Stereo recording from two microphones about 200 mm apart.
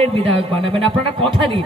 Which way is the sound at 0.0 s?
30° right (ahead or behind).